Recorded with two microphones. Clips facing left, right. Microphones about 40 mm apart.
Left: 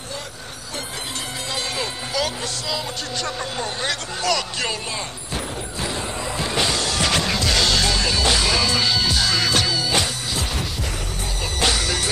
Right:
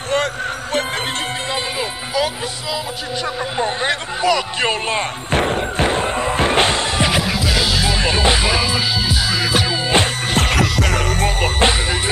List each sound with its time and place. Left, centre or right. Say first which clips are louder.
1.5 s speech: right 4 dB; centre
3.5 s speech: right 6 dB; right
4.6 s music: right 8 dB; right
7.1 s music: right 2 dB; centre
8.0 s music: right 4 dB; right
9.7 s music: right 5 dB; right
10.3 s music: right 10 dB; right
11.6 s music: right 3 dB; right